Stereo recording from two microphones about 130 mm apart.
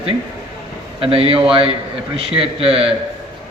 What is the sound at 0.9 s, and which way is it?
A man's voice, 45° right (ahead or behind).